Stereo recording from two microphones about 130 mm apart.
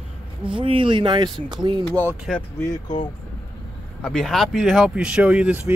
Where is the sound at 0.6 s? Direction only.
40° right (ahead or behind).